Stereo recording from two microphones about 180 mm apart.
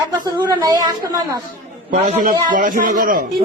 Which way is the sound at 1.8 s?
45° right (ahead or behind).